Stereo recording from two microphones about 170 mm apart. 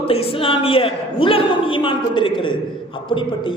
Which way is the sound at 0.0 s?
35° left (ahead or behind).